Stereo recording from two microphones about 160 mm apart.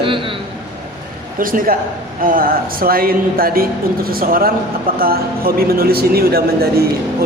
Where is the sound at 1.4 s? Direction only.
60° right (ahead or behind).